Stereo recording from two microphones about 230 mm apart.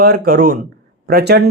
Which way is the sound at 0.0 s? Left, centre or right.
Right.